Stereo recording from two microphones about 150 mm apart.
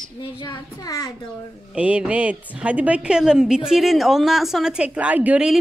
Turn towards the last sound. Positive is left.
turn(degrees=-5)  # may be behind; listen again after turning